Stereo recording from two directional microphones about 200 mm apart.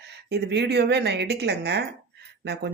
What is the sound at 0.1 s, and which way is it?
A woman's voice, 55° right (ahead or behind).